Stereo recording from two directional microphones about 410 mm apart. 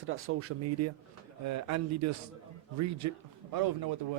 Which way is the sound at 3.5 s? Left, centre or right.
Right.